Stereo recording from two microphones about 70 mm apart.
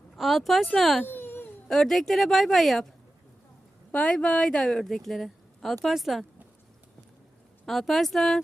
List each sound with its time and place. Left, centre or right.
0.2 s speech: centre
1.0 s a sound: left
1.6 s speech: centre
3.9 s speech: centre
7.6 s speech: centre